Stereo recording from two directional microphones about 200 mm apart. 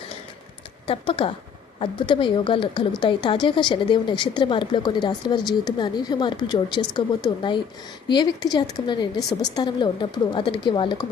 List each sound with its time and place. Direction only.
0.9 s a woman's voice: 25° left (ahead or behind)